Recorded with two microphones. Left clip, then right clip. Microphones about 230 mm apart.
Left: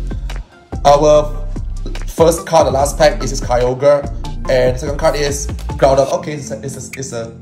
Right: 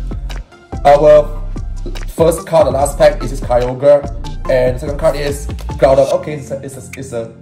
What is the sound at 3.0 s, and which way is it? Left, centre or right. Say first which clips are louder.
Speech: right 2 dB; centre.